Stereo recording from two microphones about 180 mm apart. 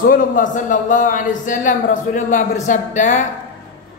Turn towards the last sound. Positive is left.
turn(degrees=45)  # may be behind; listen again after turning